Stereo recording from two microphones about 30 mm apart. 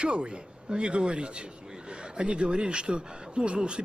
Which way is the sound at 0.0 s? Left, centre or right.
Right.